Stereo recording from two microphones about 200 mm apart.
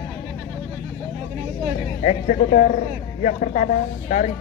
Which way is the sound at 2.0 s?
40° left (ahead or behind).